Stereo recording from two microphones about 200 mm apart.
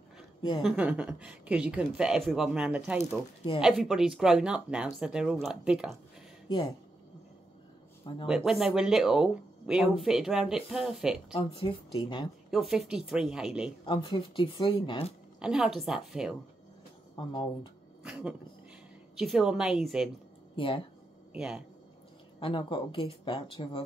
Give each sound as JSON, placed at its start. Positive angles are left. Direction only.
{"t": 0.7, "sound": "speech", "side_deg": -5}
{"t": 8.3, "sound": "speech", "side_deg": 0}
{"t": 11.3, "sound": "speech", "side_deg": 25}
{"t": 12.4, "sound": "speech", "side_deg": 0}
{"t": 13.8, "sound": "speech", "side_deg": 25}
{"t": 15.3, "sound": "speech", "side_deg": -5}
{"t": 17.1, "sound": "speech", "side_deg": 25}
{"t": 19.1, "sound": "speech", "side_deg": 0}
{"t": 20.5, "sound": "speech", "side_deg": 25}
{"t": 21.3, "sound": "speech", "side_deg": -5}
{"t": 22.4, "sound": "speech", "side_deg": 25}